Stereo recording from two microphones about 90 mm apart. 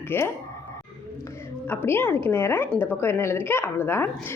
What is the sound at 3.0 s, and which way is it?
A woman's voice, 30° left (ahead or behind).